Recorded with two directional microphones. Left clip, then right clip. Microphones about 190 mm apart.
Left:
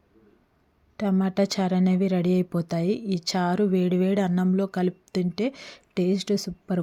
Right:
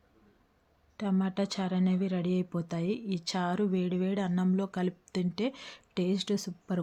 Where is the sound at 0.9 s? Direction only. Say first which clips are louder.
Left 8 dB; 25° left (ahead or behind).